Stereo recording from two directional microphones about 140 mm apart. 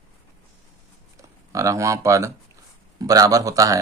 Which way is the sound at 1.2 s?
25° right (ahead or behind).